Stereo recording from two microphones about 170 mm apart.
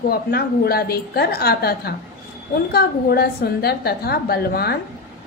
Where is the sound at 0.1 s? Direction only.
65° left (ahead or behind).